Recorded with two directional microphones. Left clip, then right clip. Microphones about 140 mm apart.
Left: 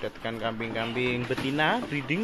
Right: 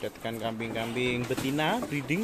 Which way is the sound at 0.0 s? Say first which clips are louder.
Left 2 dB; 20° right (ahead or behind).